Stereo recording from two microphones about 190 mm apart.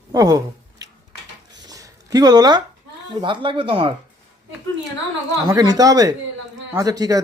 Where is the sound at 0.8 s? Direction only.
20° right (ahead or behind).